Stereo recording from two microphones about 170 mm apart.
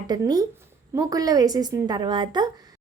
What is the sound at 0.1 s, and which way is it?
A woman's voice, 25° right (ahead or behind).